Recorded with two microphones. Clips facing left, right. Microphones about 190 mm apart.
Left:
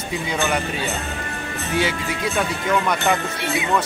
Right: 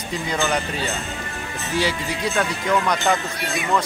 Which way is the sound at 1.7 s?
60° left (ahead or behind).